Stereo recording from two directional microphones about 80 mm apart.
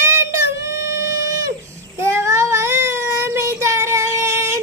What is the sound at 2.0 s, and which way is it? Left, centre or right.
Child singing, right.